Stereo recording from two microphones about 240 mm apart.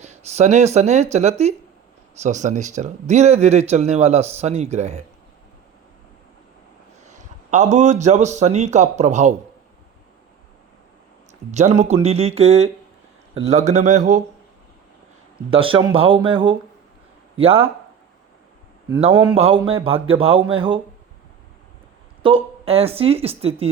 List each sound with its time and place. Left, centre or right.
0.0 s speech: right
7.0 s a man's voice: right
11.5 s speech: right
15.4 s speech: right
18.9 s speech: right
22.2 s speech: right